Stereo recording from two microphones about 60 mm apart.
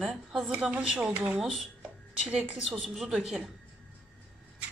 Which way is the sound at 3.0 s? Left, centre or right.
Centre.